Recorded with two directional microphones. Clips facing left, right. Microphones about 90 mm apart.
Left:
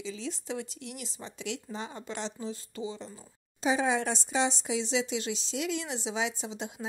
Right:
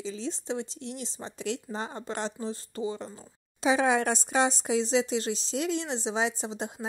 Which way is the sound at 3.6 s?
70° right (ahead or behind).